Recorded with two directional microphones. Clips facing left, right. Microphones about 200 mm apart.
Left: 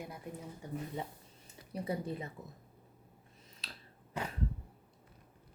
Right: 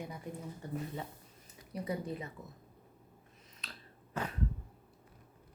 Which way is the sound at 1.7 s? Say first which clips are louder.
Even; 30° left (ahead or behind).